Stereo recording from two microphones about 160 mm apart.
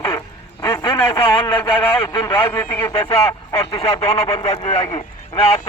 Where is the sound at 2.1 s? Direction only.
15° left (ahead or behind).